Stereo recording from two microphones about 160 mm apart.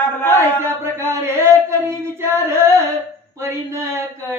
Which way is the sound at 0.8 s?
15° right (ahead or behind).